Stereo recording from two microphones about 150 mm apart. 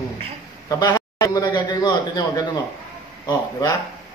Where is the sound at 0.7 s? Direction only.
25° left (ahead or behind).